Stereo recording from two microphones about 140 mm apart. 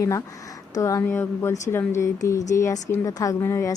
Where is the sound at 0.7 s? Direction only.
25° left (ahead or behind).